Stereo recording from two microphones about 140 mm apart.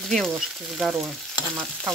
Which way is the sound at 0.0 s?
Centre (ahead or behind).